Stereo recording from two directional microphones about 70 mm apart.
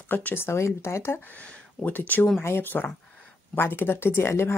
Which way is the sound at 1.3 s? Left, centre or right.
Left.